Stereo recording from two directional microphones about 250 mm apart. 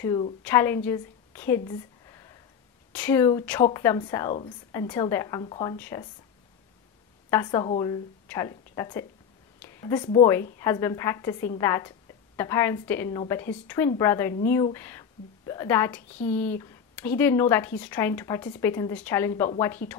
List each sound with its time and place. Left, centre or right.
0.0 s a woman's voice: centre
4.7 s speech: centre
7.2 s a woman's voice: centre